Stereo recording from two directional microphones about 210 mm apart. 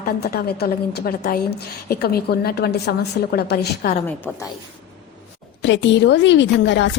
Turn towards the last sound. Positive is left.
turn(degrees=55)  # may be behind; listen again after turning